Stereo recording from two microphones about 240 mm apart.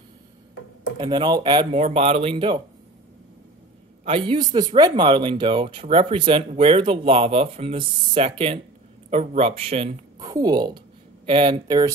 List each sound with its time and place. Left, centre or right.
0.9 s speech: centre
4.0 s speech: right